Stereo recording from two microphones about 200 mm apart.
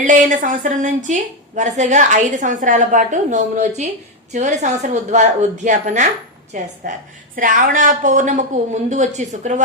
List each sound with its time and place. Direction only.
0.0 s a woman's voice: 40° right (ahead or behind)